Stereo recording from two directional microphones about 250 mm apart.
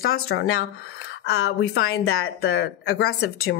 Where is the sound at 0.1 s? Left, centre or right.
Left.